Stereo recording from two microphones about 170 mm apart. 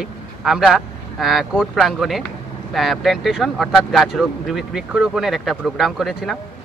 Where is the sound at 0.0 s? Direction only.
5° right (ahead or behind).